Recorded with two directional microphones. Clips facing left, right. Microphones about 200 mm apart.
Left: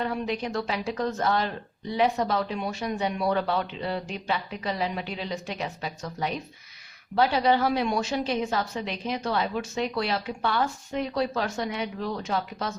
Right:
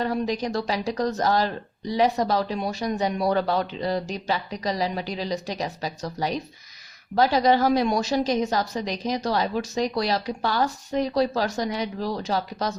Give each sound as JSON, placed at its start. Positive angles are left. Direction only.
{"t": 0.0, "sound": "a woman's voice", "side_deg": -40}